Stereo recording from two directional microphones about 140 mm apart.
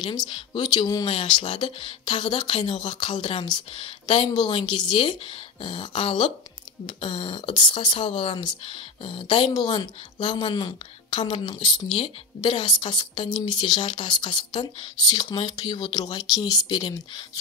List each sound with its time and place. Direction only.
0.0 s speech: 30° left (ahead or behind)